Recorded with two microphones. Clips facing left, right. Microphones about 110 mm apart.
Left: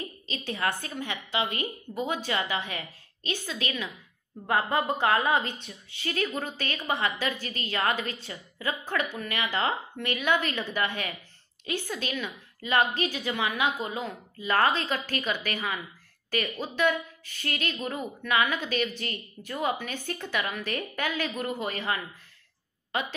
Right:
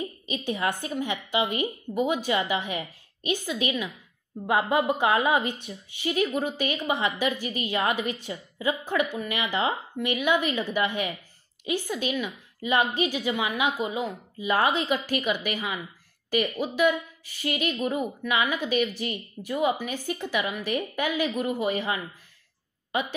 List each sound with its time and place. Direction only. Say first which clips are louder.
0.0 s a woman's voice: right 5 dB; 15° right (ahead or behind)